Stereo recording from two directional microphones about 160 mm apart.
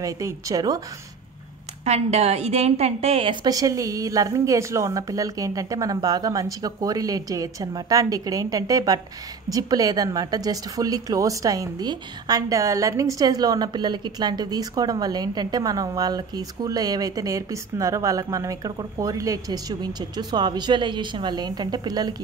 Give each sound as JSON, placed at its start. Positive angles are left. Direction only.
{"t": 0.0, "sound": "a woman's voice", "side_deg": -20}
{"t": 1.9, "sound": "a woman's voice", "side_deg": -40}
{"t": 3.4, "sound": "a woman's voice", "side_deg": -20}